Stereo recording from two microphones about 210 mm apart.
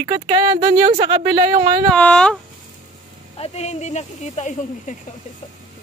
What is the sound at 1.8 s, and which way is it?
Speech, 5° left (ahead or behind).